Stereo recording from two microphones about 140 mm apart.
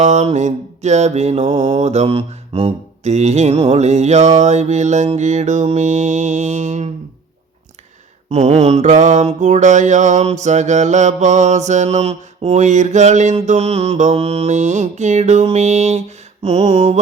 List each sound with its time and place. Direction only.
0.0 s mantra: 55° right (ahead or behind)
8.3 s mantra: 50° right (ahead or behind)